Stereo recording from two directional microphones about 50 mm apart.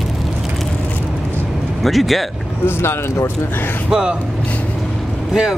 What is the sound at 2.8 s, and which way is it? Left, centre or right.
Speech, left.